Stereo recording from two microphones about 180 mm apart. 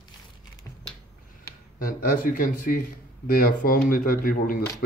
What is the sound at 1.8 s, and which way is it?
Speech, 50° left (ahead or behind).